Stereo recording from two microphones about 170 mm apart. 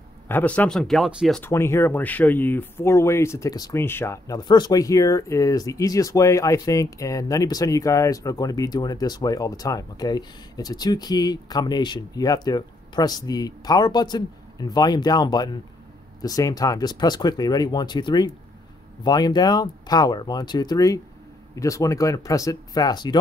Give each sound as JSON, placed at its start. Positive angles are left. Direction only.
{"t": 0.3, "sound": "speech", "side_deg": 10}
{"t": 1.4, "sound": "speech", "side_deg": 15}